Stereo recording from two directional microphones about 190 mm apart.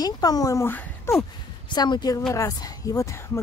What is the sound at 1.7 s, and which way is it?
Speech, 25° left (ahead or behind).